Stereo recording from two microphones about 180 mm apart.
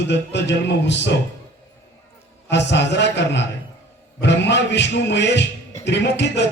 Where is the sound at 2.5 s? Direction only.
75° left (ahead or behind).